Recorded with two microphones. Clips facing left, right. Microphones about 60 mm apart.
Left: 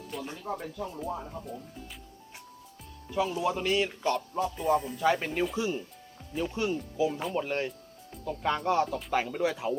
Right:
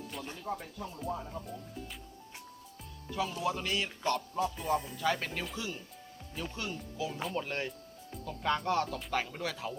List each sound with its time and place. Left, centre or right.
0.1 s music: centre
0.5 s speech: centre
3.2 s speech: centre
4.4 s speech: centre
5.0 s speech: centre
7.1 s speech: centre
7.3 s speech: centre